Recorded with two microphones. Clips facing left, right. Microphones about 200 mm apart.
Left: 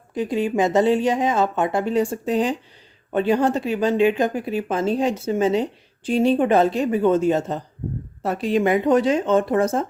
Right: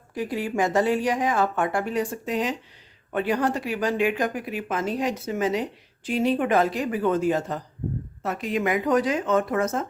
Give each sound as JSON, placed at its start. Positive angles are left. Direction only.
{"t": 0.1, "sound": "speech", "side_deg": 20}